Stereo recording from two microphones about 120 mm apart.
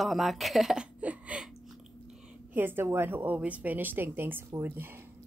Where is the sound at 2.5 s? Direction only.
20° right (ahead or behind).